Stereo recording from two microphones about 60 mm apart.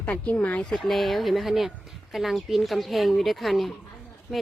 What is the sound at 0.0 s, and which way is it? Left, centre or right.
Speech, left.